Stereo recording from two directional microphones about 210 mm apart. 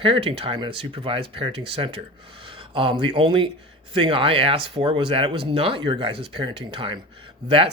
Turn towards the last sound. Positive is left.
turn(degrees=-25)  # may be behind; listen again after turning